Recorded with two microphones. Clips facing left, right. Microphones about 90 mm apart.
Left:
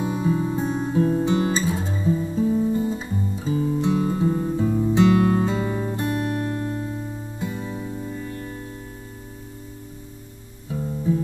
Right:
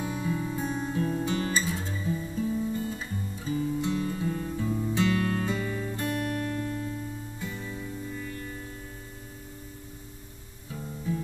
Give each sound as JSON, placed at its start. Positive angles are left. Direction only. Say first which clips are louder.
{"t": 0.0, "sound": "music", "louder": "left 8 dB", "side_deg": 25}
{"t": 2.8, "sound": "guitar", "louder": "left 8 dB", "side_deg": 20}
{"t": 6.0, "sound": "music", "louder": "left 4 dB", "side_deg": 20}
{"t": 11.1, "sound": "music", "louder": "left 9 dB", "side_deg": 25}